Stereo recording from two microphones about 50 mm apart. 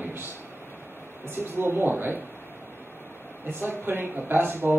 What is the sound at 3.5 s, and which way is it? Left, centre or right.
A man's voice, right.